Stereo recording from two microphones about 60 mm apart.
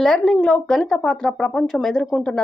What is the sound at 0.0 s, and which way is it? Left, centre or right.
Speech, centre.